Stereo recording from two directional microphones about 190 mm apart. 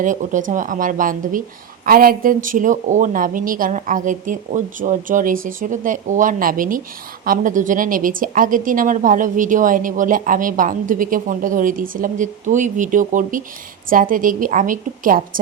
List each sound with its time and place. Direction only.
0.0 s a woman's voice: 40° right (ahead or behind)